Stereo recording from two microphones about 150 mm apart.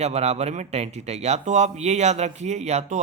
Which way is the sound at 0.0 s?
45° right (ahead or behind).